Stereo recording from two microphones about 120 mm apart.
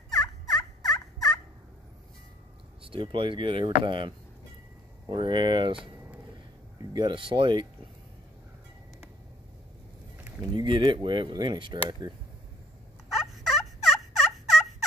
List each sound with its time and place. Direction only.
0.1 s fowl: 5° left (ahead or behind)
2.8 s speech: 45° right (ahead or behind)
5.1 s speech: 40° right (ahead or behind)
6.8 s speech: 35° right (ahead or behind)
10.4 s speech: 40° right (ahead or behind)
13.1 s fowl: centre (ahead or behind)